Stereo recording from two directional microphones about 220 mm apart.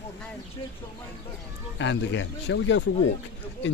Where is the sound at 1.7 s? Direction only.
55° left (ahead or behind).